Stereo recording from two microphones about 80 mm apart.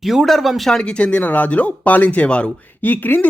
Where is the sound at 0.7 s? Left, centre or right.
Centre.